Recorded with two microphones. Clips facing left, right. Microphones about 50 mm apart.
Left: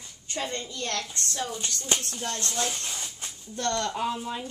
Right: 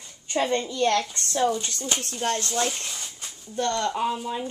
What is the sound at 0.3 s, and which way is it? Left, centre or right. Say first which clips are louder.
Speech: right 8 dB; right.